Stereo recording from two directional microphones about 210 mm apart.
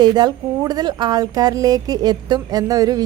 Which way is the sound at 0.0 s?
20° right (ahead or behind).